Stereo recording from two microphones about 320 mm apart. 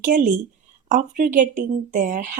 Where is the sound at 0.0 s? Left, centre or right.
Right.